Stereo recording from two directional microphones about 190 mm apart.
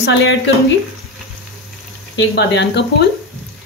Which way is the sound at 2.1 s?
70° left (ahead or behind).